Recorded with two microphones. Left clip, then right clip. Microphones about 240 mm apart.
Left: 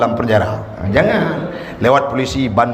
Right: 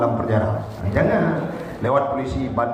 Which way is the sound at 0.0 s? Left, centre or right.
Left.